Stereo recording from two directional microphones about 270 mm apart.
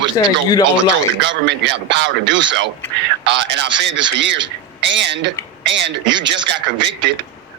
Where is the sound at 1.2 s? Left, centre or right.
Right.